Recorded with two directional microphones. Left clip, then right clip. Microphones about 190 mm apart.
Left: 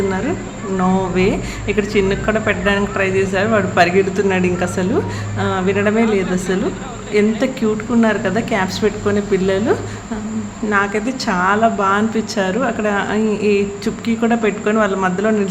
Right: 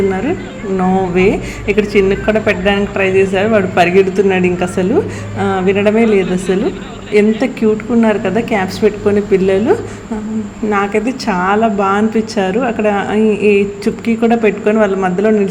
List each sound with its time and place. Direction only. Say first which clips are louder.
0.8 s a woman's voice: right 4 dB; 15° right (ahead or behind)